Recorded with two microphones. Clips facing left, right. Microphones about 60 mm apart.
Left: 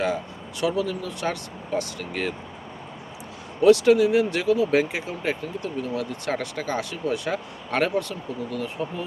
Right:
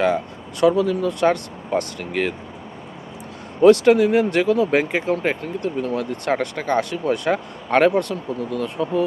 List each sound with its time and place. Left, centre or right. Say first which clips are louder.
0.6 s speech: right 8 dB; right
3.6 s speech: right 3 dB; right